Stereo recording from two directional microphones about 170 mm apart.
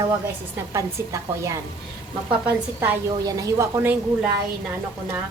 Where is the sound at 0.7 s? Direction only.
15° right (ahead or behind).